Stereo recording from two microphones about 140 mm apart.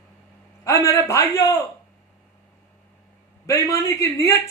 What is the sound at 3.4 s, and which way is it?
Speech, 20° left (ahead or behind).